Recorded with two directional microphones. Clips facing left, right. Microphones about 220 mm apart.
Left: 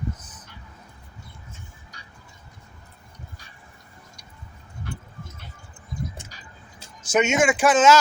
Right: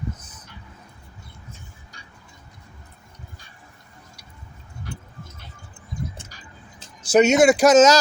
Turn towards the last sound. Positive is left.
turn(degrees=-40)  # may be behind; listen again after turning